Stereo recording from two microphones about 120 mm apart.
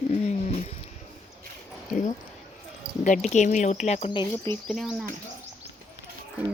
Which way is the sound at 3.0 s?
85° left.